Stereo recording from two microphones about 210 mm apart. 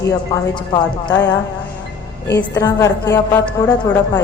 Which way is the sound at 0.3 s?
20° left (ahead or behind).